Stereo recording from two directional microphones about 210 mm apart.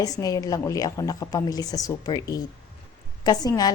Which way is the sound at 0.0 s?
15° left (ahead or behind).